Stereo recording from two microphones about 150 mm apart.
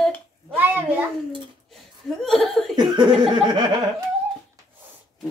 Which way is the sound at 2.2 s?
Centre (ahead or behind).